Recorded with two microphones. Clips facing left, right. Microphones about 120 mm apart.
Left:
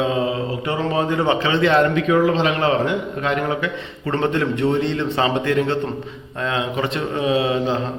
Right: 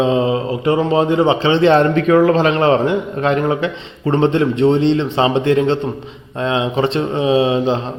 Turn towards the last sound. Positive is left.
turn(degrees=-25)  # may be behind; listen again after turning